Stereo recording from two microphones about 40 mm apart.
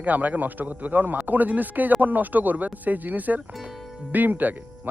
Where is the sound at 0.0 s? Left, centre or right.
Right.